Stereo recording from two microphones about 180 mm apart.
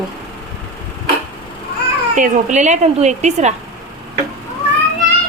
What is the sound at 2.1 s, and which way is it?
A woman's voice, 45° right (ahead or behind).